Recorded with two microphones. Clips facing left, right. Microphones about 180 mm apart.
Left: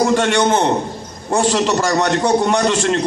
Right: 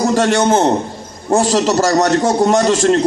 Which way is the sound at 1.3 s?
40° right (ahead or behind).